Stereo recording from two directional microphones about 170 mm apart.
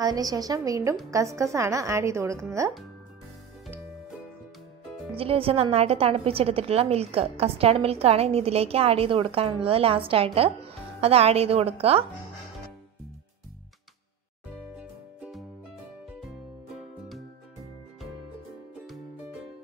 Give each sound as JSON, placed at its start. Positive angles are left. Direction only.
{"t": 0.0, "sound": "a woman's voice", "side_deg": -20}
{"t": 5.1, "sound": "a woman's voice", "side_deg": -35}
{"t": 14.8, "sound": "music", "side_deg": -5}